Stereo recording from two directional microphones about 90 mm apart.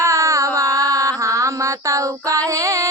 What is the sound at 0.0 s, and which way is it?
Mantra, 35° right (ahead or behind).